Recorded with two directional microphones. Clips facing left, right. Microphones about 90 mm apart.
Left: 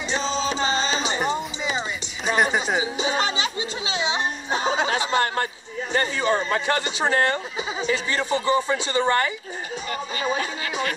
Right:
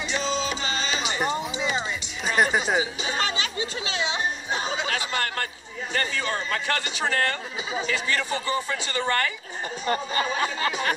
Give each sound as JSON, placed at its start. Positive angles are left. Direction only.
{"t": 0.1, "sound": "music", "side_deg": 30}
{"t": 1.2, "sound": "music", "side_deg": 0}
{"t": 2.8, "sound": "music", "side_deg": 20}
{"t": 4.8, "sound": "speech", "side_deg": 25}
{"t": 9.8, "sound": "speech", "side_deg": -40}